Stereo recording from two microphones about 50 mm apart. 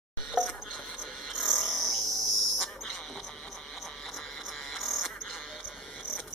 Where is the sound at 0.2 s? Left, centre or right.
Centre.